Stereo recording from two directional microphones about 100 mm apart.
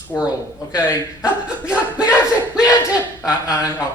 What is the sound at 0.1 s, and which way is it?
Speech, 20° left (ahead or behind).